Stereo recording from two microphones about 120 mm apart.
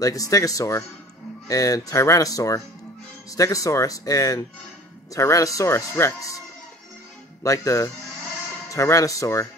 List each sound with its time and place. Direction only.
0.0 s speech: 30° left (ahead or behind)
7.4 s speech: 25° left (ahead or behind)